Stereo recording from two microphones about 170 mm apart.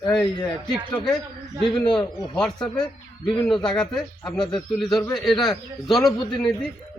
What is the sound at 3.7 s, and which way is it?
Speech, 5° left (ahead or behind).